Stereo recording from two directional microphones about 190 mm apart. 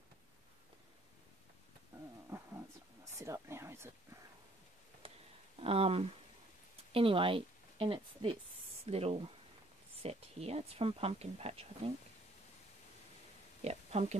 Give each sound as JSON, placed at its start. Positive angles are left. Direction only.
{"t": 2.2, "sound": "wild animals", "side_deg": -15}
{"t": 3.2, "sound": "speech", "side_deg": -15}
{"t": 5.0, "sound": "a sound", "side_deg": -30}
{"t": 5.6, "sound": "a woman's voice", "side_deg": -30}
{"t": 13.7, "sound": "speech", "side_deg": -35}